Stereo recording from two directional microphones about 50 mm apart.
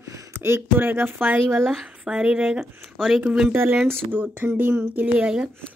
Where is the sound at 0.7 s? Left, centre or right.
Right.